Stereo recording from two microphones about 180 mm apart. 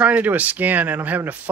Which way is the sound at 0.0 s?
10° right (ahead or behind).